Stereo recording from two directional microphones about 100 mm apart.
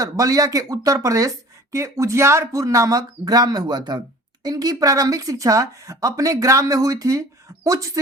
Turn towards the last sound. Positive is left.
turn(degrees=-35)  # may be behind; listen again after turning